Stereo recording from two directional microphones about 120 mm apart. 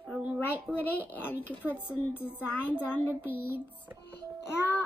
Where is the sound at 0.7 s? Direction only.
5° right (ahead or behind).